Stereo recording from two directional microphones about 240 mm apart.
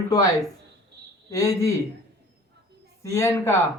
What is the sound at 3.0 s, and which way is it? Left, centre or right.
Speech, centre.